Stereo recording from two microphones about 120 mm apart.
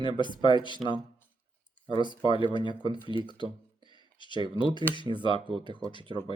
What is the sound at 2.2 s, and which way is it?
Speech, 40° left (ahead or behind).